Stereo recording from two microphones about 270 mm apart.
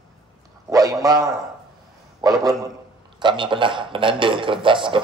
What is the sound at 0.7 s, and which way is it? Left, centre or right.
A man's voice, centre.